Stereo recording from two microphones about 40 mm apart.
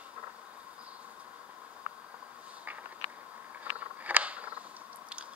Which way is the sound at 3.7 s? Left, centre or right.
Right.